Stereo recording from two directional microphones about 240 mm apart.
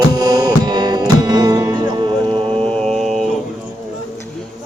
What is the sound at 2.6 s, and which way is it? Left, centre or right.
Music, centre.